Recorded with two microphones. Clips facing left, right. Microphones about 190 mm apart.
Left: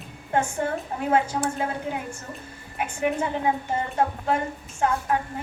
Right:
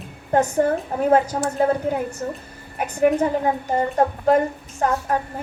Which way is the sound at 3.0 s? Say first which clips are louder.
Right 8 dB; 40° right (ahead or behind).